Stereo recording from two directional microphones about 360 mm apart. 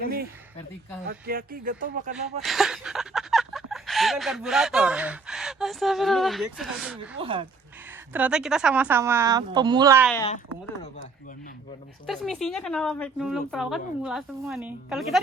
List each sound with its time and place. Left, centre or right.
1.0 s speech: right
2.4 s speech: centre
7.2 s speech: centre
8.1 s speech: centre
10.1 s speech: centre
12.0 s speech: centre